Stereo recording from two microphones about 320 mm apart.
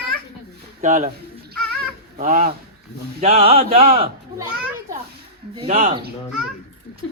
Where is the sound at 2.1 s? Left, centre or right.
Right.